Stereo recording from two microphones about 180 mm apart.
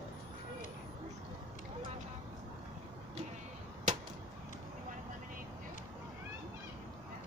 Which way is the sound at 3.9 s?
40° right (ahead or behind).